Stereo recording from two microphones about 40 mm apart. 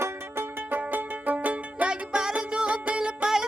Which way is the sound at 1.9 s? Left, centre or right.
Centre.